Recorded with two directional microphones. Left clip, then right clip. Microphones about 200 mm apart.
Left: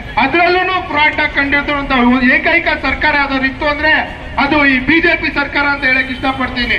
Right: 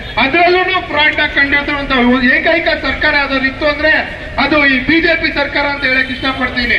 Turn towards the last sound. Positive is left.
turn(degrees=-35)  # may be behind; listen again after turning